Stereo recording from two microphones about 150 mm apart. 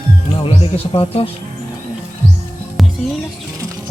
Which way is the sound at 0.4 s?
40° left (ahead or behind).